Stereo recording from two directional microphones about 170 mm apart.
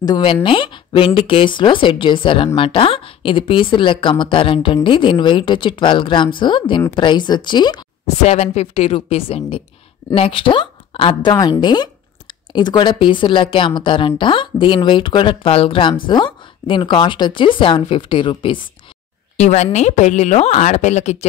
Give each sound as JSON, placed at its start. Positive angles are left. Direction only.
{"t": 0.0, "sound": "speech", "side_deg": 25}
{"t": 8.2, "sound": "a woman's voice", "side_deg": 40}
{"t": 19.3, "sound": "a woman's voice", "side_deg": 40}